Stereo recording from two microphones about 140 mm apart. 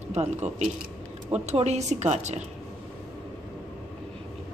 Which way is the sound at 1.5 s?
50° right (ahead or behind).